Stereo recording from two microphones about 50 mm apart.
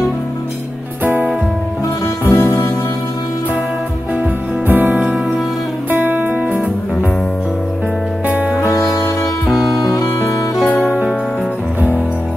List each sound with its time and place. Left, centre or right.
1.0 s music: right
2.2 s music: left
4.1 s music: right
10.7 s music: left